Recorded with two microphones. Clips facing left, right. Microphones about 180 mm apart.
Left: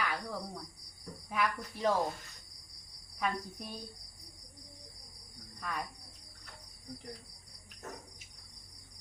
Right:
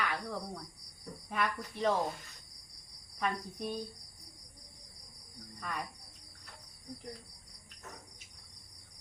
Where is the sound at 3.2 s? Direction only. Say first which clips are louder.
Even; centre (ahead or behind).